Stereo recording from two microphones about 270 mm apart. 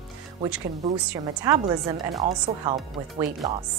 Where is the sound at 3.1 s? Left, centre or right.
Centre.